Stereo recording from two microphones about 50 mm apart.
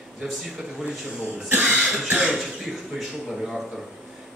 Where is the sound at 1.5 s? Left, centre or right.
Right.